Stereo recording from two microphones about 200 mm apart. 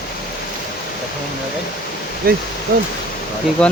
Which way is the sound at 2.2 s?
50° right (ahead or behind).